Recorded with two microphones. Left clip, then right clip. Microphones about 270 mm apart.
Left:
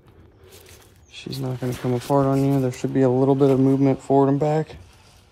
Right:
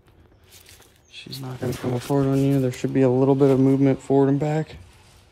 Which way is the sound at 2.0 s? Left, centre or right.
Centre.